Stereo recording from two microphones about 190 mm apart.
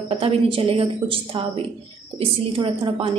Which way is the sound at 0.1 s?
30° right (ahead or behind).